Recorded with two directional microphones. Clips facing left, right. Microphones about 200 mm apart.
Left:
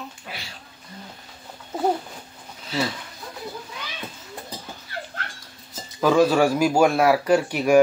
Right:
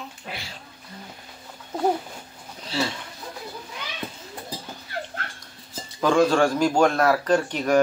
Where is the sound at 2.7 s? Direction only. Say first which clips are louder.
Left 1 dB; 30° right (ahead or behind).